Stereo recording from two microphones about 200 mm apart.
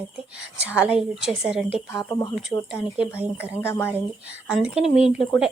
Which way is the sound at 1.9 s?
15° left (ahead or behind).